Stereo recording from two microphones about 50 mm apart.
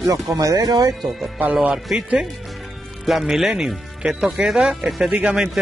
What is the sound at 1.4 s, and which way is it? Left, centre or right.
Speech, right.